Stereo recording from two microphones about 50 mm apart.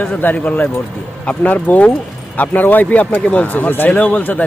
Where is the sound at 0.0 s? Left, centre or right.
Left.